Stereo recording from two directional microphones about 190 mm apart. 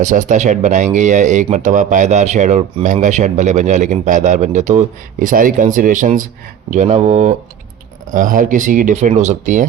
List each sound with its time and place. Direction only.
0.0 s speech: 40° right (ahead or behind)